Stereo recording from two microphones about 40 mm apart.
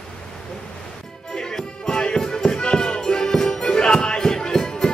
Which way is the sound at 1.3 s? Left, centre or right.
Centre.